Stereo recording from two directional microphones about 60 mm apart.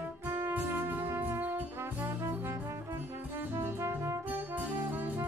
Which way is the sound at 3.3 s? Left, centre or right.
Right.